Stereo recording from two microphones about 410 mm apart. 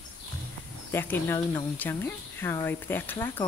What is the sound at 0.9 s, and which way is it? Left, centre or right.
Speech, centre.